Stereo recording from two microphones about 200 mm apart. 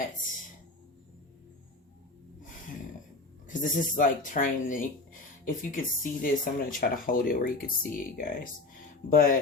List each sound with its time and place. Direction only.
3.4 s speech: 40° left (ahead or behind)